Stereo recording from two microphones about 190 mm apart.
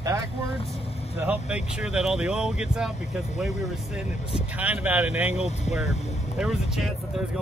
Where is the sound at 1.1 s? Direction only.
10° right (ahead or behind).